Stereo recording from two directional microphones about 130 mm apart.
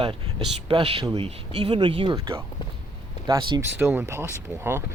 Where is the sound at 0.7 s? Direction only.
45° right (ahead or behind).